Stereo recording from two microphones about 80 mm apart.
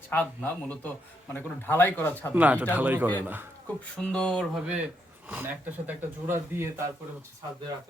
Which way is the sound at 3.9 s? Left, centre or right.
Centre.